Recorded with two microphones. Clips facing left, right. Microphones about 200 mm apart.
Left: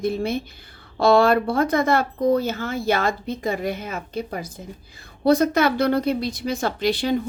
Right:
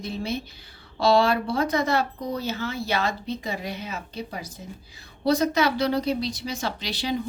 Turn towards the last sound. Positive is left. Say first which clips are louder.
# left 7 dB
turn(degrees=55)  # may be behind; listen again after turning